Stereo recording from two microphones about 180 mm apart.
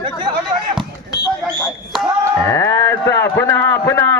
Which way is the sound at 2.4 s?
15° left (ahead or behind).